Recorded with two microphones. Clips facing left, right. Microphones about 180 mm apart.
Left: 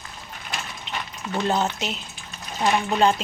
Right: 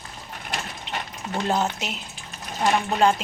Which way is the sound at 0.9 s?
35° right (ahead or behind).